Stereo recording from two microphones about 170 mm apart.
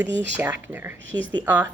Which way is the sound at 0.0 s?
10° right (ahead or behind).